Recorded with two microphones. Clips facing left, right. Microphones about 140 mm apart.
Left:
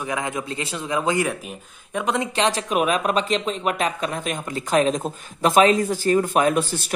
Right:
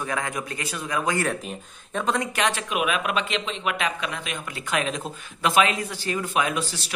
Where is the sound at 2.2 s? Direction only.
30° left (ahead or behind).